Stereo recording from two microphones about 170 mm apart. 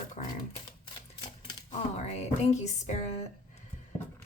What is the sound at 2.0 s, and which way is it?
Speech, 40° left (ahead or behind).